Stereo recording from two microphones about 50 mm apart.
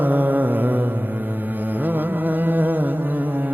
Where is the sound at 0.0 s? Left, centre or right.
Right.